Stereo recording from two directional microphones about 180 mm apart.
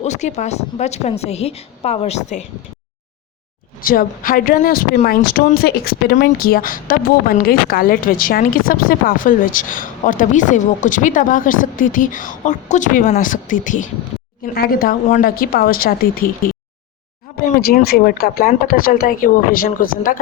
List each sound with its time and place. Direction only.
0.0 s a woman's voice: 40° left (ahead or behind)
3.8 s speech: 50° left (ahead or behind)
17.6 s speech: 55° left (ahead or behind)